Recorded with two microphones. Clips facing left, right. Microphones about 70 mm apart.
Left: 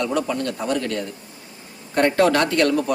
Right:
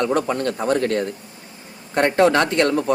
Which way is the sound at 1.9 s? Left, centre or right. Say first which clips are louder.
Right 1 dB; right.